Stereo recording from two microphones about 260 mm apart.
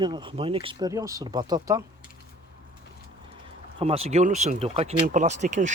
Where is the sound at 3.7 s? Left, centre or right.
Right.